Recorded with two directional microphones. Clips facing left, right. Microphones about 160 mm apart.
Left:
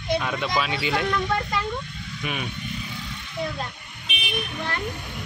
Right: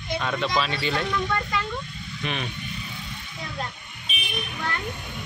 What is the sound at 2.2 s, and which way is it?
Speech, 5° left (ahead or behind).